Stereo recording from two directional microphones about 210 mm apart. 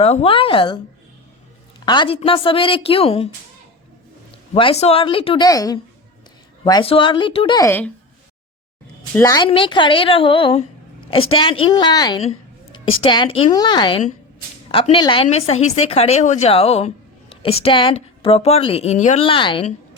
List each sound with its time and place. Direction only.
0.0 s a woman's voice: 30° left (ahead or behind)
1.8 s a woman's voice: 20° left (ahead or behind)
4.5 s a woman's voice: 25° left (ahead or behind)
9.1 s a woman's voice: 15° left (ahead or behind)